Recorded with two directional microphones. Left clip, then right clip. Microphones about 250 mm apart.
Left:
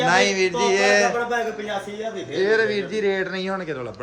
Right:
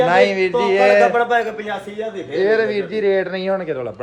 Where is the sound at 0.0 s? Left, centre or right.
Centre.